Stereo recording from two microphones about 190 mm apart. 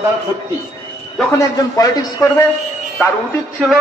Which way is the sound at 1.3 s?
15° left (ahead or behind).